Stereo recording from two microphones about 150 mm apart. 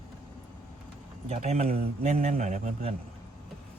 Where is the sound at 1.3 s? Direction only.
45° right (ahead or behind).